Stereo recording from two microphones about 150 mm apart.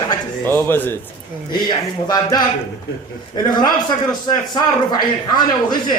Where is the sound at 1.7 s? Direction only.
25° left (ahead or behind).